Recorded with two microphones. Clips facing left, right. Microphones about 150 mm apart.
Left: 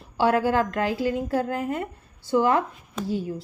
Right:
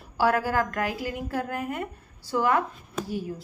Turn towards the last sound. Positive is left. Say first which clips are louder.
# left 3 dB
turn(degrees=25)  # may be behind; listen again after turning